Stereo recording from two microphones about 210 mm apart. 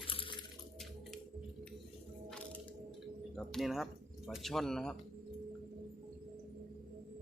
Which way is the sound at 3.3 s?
Centre (ahead or behind).